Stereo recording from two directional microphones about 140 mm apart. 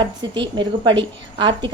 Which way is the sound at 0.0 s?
35° right (ahead or behind).